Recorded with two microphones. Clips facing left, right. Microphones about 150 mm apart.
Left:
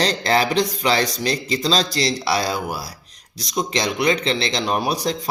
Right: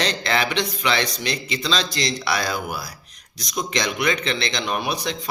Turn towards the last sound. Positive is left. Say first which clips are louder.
# left 4 dB
turn(degrees=35)  # may be behind; listen again after turning